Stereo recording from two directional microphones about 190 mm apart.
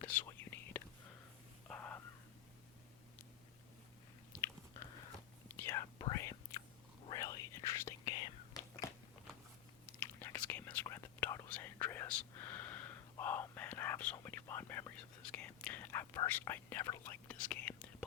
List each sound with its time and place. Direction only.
0.0 s whispering: 10° left (ahead or behind)
5.5 s whispering: 15° left (ahead or behind)
10.0 s whispering: 15° left (ahead or behind)